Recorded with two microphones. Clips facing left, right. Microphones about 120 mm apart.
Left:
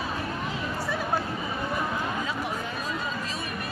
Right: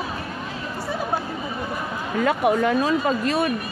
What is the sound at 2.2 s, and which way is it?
Speech, 65° right (ahead or behind).